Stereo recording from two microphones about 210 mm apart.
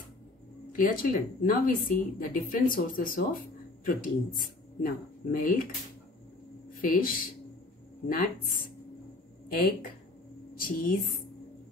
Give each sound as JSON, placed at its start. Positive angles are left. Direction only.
{"t": 0.7, "sound": "a woman's voice", "side_deg": 40}
{"t": 6.8, "sound": "speech", "side_deg": 40}
{"t": 10.6, "sound": "speech", "side_deg": 40}